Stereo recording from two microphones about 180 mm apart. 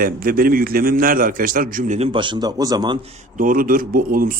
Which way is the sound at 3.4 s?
50° right (ahead or behind).